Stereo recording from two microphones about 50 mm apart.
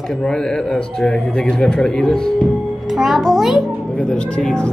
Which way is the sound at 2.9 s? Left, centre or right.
Centre.